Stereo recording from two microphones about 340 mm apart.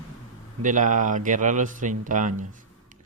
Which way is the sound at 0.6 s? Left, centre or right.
Right.